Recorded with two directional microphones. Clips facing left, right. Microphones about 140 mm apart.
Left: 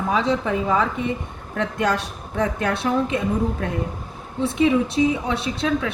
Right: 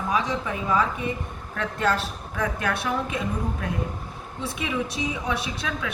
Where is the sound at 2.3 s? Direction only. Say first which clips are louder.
Left 5 dB; 30° left (ahead or behind).